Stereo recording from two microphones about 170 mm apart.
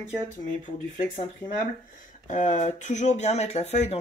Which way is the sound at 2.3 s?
45° left (ahead or behind).